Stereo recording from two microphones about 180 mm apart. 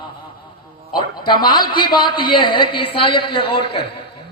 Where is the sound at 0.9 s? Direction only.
25° left (ahead or behind).